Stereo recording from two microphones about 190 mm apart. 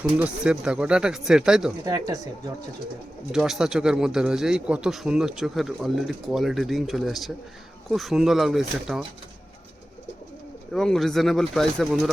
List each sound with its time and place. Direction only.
0.0 s speech: 5° right (ahead or behind)
1.8 s speech: 20° right (ahead or behind)
3.3 s speech: centre (ahead or behind)
10.7 s speech: centre (ahead or behind)